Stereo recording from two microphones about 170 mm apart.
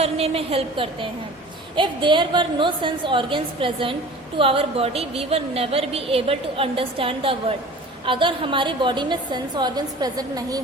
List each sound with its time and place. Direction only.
0.0 s a woman's voice: 35° right (ahead or behind)